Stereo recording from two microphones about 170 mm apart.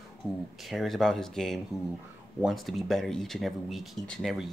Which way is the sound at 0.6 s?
Centre (ahead or behind).